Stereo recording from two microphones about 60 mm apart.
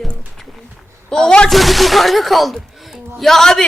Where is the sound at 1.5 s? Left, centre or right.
Centre.